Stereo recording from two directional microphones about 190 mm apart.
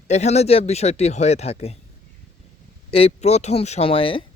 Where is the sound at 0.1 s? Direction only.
35° left (ahead or behind).